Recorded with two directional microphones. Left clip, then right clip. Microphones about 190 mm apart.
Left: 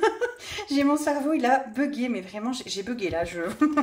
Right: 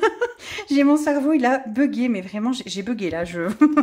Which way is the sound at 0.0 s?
55° right (ahead or behind).